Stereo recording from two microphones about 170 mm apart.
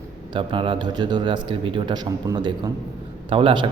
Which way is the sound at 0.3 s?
30° right (ahead or behind).